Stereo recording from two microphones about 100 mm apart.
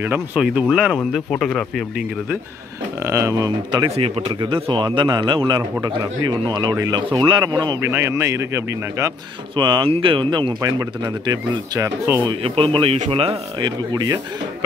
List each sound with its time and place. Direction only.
0.0 s speech: 20° right (ahead or behind)
0.4 s speech: 10° right (ahead or behind)
1.3 s speech: 5° left (ahead or behind)
3.0 s speech: 30° right (ahead or behind)
4.5 s speech: 55° right (ahead or behind)
7.8 s speech: 25° right (ahead or behind)
9.6 s speech: 50° right (ahead or behind)
9.8 s speech: 65° right (ahead or behind)
10.6 s speech: 35° right (ahead or behind)
12.4 s speech: 65° right (ahead or behind)
13.6 s speech: 45° right (ahead or behind)